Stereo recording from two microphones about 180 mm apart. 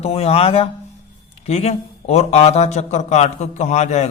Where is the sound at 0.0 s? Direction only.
35° left (ahead or behind).